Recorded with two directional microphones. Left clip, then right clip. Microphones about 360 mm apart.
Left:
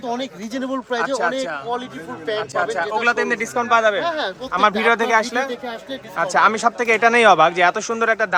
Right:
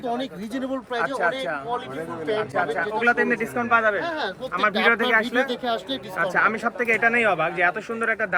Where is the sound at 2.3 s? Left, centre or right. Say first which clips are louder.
Left 3 dB; centre.